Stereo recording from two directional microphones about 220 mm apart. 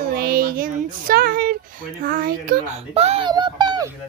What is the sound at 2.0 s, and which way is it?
Speech, 40° right (ahead or behind).